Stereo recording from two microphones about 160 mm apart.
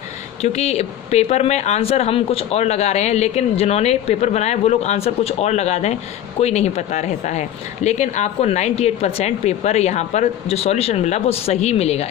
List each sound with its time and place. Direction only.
0.4 s speech: 45° left (ahead or behind)